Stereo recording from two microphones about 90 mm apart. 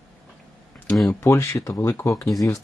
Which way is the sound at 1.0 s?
30° left (ahead or behind).